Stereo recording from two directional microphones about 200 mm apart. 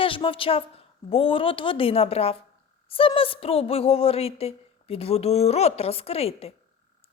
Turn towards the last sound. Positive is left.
turn(degrees=30)  # may be behind; listen again after turning